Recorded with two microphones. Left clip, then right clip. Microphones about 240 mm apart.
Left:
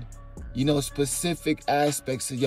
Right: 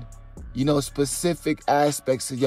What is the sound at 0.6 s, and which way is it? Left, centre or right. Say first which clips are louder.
Speech: right 2 dB; centre.